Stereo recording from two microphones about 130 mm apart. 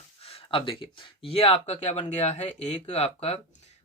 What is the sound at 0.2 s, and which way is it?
Speech, 45° left (ahead or behind).